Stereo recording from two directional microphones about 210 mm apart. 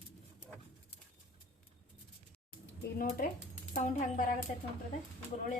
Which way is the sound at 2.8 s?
45° left (ahead or behind).